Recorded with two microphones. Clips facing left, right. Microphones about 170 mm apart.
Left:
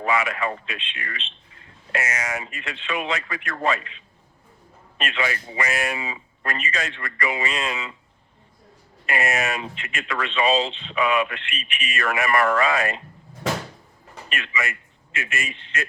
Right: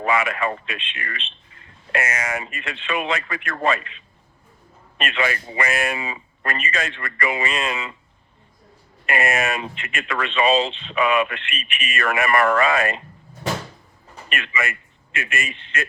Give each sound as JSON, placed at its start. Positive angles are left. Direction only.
{"t": 0.0, "sound": "speech", "side_deg": -55}
{"t": 9.0, "sound": "speech", "side_deg": -55}
{"t": 14.3, "sound": "a man's voice", "side_deg": -60}